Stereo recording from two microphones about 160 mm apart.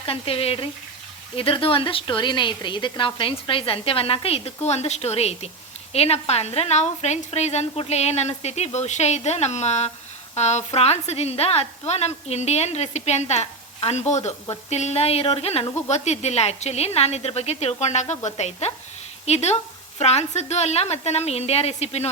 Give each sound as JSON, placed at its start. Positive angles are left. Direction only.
{"t": 0.0, "sound": "a woman's voice", "side_deg": 35}